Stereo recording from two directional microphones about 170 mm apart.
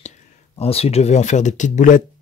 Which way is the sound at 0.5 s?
35° left (ahead or behind).